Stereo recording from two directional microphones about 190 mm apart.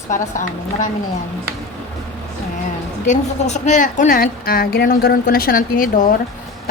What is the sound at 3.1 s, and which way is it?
A woman's voice, 40° left (ahead or behind).